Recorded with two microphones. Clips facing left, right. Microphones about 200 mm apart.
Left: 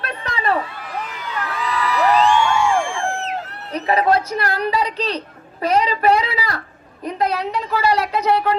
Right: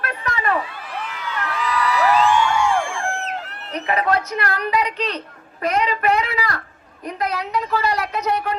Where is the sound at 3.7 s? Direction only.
35° left (ahead or behind).